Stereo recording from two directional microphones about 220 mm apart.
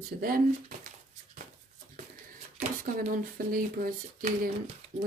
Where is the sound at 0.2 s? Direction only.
40° right (ahead or behind).